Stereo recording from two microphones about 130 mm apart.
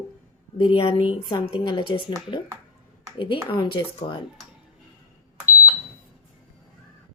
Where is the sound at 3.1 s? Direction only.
40° left (ahead or behind).